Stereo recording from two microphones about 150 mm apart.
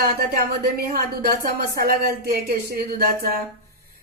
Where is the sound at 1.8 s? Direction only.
80° right.